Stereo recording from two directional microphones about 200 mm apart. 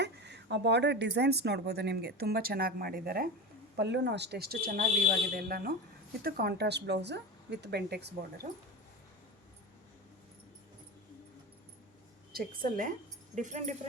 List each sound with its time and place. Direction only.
0.0 s speech: 60° right (ahead or behind)
3.8 s speech: 60° right (ahead or behind)
12.3 s a woman's voice: 45° right (ahead or behind)